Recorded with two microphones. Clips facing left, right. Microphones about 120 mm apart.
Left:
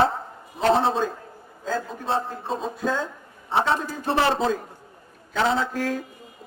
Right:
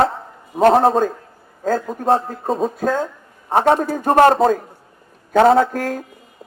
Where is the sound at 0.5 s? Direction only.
50° right (ahead or behind).